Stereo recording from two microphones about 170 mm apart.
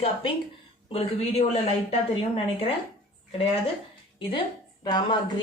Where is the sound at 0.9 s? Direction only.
35° left (ahead or behind).